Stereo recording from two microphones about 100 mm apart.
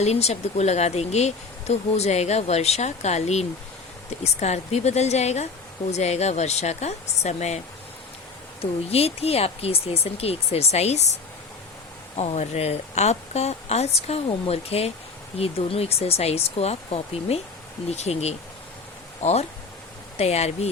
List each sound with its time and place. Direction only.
0.0 s speech: 90° left
8.9 s speech: 90° left